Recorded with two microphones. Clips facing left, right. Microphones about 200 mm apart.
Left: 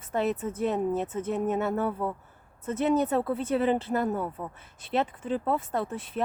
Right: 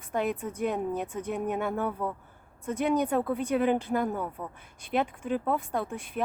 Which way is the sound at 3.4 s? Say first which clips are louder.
Right 1 dB; 10° right (ahead or behind).